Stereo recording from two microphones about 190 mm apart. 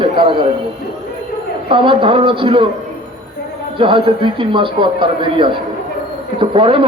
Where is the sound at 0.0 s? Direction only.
25° right (ahead or behind).